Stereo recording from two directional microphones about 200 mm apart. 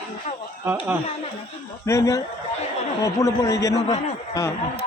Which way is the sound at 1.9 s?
15° left (ahead or behind).